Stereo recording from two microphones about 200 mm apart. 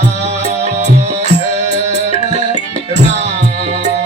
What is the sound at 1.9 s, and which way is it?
Music, 35° right (ahead or behind).